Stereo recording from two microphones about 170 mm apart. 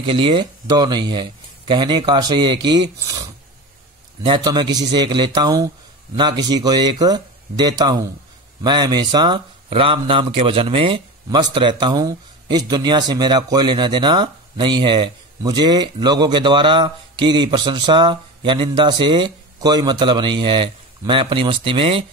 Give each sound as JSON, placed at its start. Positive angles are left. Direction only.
{"t": 0.0, "sound": "speech", "side_deg": -30}